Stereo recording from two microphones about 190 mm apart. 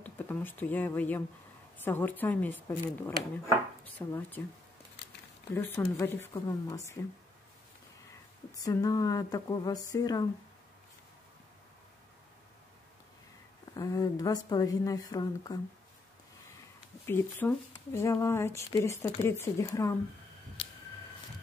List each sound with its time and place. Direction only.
0.0 s speech: 10° left (ahead or behind)
5.5 s speech: 10° left (ahead or behind)
8.5 s a woman's voice: 20° left (ahead or behind)
13.7 s a woman's voice: 20° left (ahead or behind)
17.0 s speech: 10° left (ahead or behind)